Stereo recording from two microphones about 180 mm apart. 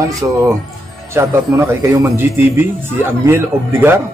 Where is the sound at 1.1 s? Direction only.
15° right (ahead or behind).